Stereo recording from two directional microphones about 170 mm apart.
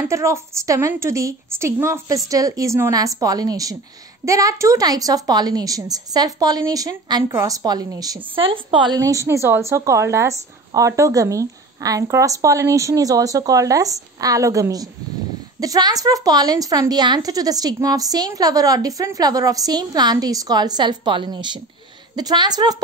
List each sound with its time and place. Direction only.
0.1 s a woman's voice: 15° right (ahead or behind)